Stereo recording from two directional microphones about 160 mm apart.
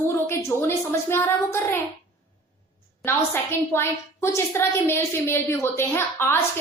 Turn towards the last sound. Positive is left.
turn(degrees=15)  # may be behind; listen again after turning